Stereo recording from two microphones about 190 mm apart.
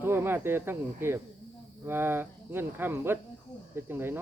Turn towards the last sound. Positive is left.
turn(degrees=-10)  # may be behind; listen again after turning